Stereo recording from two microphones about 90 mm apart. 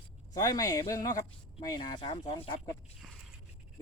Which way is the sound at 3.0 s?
Centre (ahead or behind).